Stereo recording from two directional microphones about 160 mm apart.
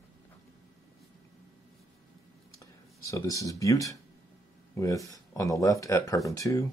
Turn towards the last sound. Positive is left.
turn(degrees=20)  # may be behind; listen again after turning